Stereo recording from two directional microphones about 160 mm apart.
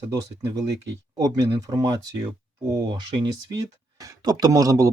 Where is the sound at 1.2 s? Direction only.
25° right (ahead or behind).